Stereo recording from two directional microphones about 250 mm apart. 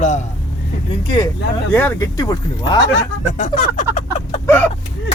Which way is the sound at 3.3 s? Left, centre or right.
Left.